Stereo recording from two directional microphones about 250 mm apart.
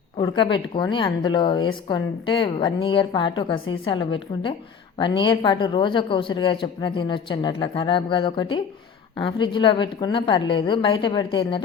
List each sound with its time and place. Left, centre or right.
0.2 s a woman's voice: centre